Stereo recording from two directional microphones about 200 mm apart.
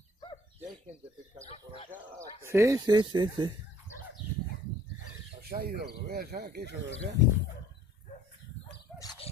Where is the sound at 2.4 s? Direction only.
15° right (ahead or behind).